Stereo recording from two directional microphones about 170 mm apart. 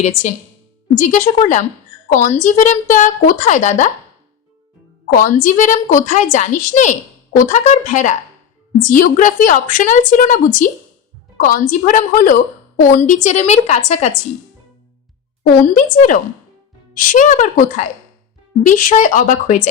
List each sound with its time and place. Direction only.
0.0 s a woman's voice: 45° left (ahead or behind)
5.1 s a woman's voice: 50° left (ahead or behind)
15.6 s a woman's voice: 50° left (ahead or behind)